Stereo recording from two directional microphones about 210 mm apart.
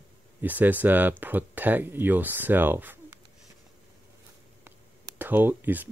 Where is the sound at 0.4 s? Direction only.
10° right (ahead or behind).